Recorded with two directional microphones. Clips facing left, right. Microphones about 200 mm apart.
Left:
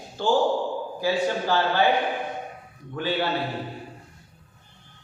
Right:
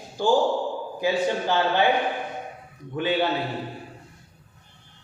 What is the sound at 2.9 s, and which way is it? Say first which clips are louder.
Speech: right 3 dB; 20° right (ahead or behind).